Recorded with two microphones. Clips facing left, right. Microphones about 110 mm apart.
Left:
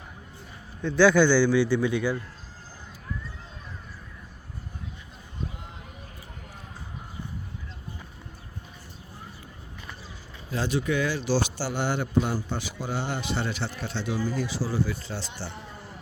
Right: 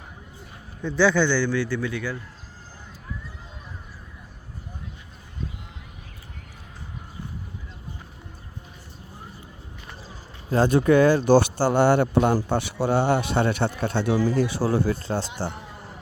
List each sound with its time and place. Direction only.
0.8 s a man's voice: 5° right (ahead or behind)
1.0 s a man's voice: 5° left (ahead or behind)
10.5 s speech: 50° right (ahead or behind)